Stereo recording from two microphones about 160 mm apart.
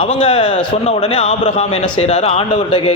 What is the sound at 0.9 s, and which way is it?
A man's voice, 45° left (ahead or behind).